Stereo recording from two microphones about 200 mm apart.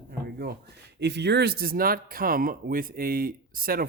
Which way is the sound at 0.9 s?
60° right (ahead or behind).